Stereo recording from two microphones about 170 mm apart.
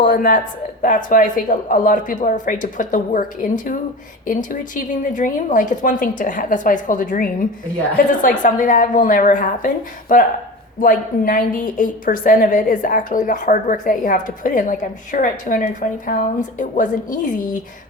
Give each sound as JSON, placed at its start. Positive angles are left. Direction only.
{"t": 0.0, "sound": "a woman's voice", "side_deg": 55}